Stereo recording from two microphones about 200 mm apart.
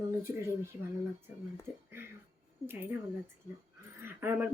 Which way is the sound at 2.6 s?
10° right (ahead or behind).